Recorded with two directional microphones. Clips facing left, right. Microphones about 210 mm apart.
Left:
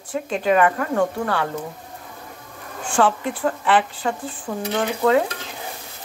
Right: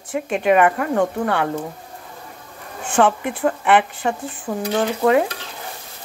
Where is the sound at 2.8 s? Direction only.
20° right (ahead or behind).